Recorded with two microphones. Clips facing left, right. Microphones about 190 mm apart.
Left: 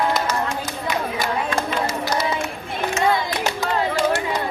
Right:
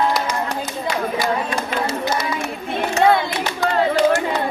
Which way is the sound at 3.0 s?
60° right (ahead or behind).